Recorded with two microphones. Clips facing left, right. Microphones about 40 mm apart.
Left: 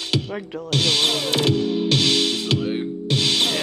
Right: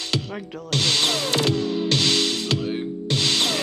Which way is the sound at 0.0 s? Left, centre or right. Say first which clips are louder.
Left 2 dB; left.